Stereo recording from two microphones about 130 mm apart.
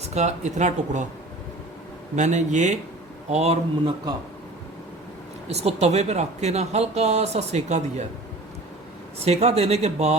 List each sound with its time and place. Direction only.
0.0 s a woman's voice: 60° right (ahead or behind)
2.1 s a woman's voice: 65° right (ahead or behind)
5.5 s a woman's voice: 55° right (ahead or behind)
9.1 s a woman's voice: 55° right (ahead or behind)